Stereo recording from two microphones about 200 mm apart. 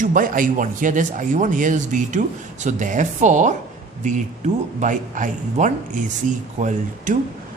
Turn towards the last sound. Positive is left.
turn(degrees=-40)  # may be behind; listen again after turning